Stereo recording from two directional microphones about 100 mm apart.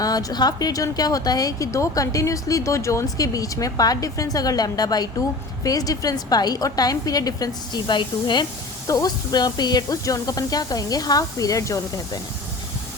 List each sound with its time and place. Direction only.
0.0 s a woman's voice: 40° left (ahead or behind)
8.9 s a woman's voice: 40° left (ahead or behind)